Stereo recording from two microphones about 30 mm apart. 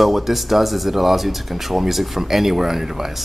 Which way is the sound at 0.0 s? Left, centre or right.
Centre.